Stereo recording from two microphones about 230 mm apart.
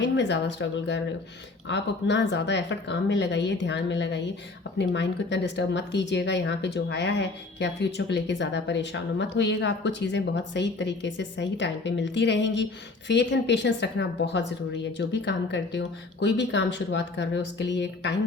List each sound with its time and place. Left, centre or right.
0.0 s speech: left